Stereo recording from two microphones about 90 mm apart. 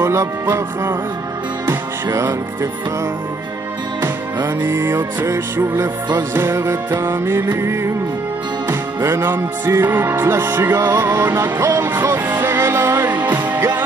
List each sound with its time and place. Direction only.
0.0 s music: 35° right (ahead or behind)
2.1 s music: 35° right (ahead or behind)
4.0 s music: 25° right (ahead or behind)
11.6 s music: 35° right (ahead or behind)
12.3 s music: 25° right (ahead or behind)